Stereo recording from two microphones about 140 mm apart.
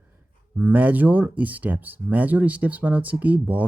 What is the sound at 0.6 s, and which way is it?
Speech, 10° right (ahead or behind).